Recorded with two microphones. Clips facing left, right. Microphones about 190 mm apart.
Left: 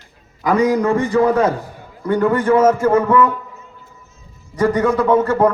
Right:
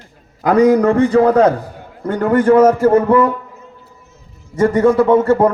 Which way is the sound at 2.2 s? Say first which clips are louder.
Right 4 dB; 45° right (ahead or behind).